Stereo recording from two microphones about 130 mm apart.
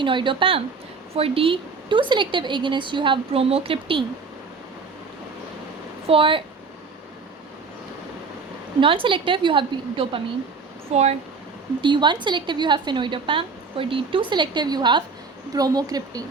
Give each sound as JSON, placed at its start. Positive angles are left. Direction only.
{"t": 0.0, "sound": "a woman's voice", "side_deg": -40}
{"t": 6.1, "sound": "speech", "side_deg": -45}
{"t": 8.8, "sound": "a woman's voice", "side_deg": -40}
{"t": 11.8, "sound": "a woman's voice", "side_deg": -35}